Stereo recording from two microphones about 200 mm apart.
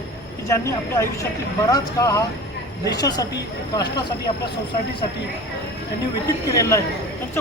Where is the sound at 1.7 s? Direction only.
15° left (ahead or behind).